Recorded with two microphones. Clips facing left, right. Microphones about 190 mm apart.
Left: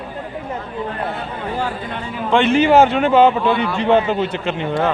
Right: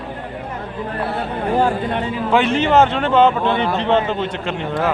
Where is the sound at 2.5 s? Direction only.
10° left (ahead or behind).